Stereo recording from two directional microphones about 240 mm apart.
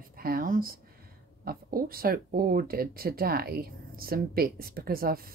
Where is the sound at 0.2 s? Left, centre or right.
Right.